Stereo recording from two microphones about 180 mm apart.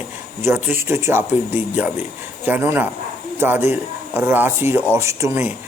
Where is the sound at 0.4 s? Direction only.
15° right (ahead or behind).